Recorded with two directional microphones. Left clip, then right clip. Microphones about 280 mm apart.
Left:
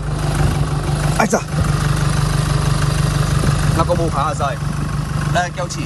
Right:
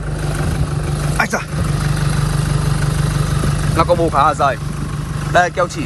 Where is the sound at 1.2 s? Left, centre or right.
Left.